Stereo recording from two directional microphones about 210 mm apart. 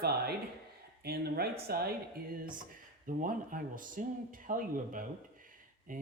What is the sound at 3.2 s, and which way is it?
A man's voice, 40° right (ahead or behind).